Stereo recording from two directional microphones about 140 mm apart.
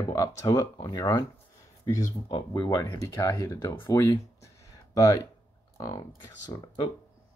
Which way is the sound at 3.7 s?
35° left (ahead or behind).